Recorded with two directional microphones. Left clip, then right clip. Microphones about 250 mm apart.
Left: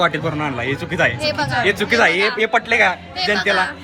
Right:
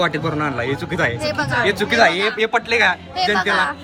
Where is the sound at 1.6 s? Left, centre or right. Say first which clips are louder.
Even; centre.